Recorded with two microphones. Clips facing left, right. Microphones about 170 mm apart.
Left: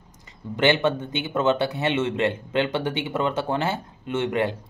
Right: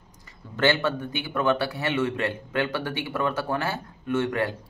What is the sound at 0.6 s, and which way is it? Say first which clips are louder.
A man's voice: left 3 dB; 20° left (ahead or behind).